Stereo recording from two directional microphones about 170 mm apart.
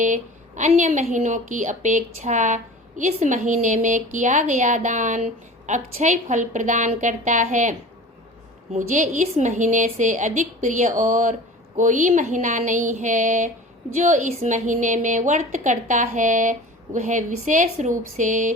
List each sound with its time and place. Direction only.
0.0 s a woman's voice: 45° right (ahead or behind)